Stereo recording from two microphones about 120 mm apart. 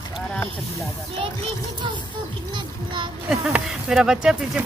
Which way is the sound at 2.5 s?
40° right (ahead or behind).